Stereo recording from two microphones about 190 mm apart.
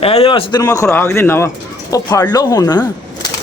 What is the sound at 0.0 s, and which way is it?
Speech, 30° left (ahead or behind).